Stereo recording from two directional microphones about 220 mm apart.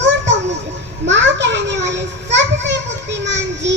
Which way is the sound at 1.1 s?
55° right (ahead or behind).